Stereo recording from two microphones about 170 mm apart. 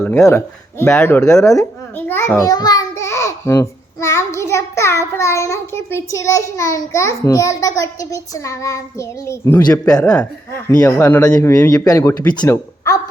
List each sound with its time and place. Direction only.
0.0 s a child's voice: 15° left (ahead or behind)